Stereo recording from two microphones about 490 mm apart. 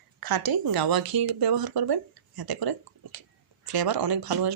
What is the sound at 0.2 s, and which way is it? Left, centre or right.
Speech, right.